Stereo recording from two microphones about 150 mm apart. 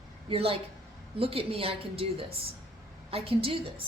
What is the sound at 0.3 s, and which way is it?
A woman's voice, 40° right (ahead or behind).